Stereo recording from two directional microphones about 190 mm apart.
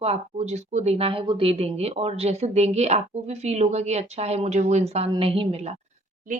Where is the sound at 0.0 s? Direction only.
35° right (ahead or behind).